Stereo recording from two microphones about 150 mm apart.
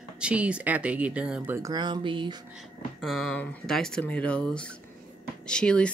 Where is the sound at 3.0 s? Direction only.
Centre (ahead or behind).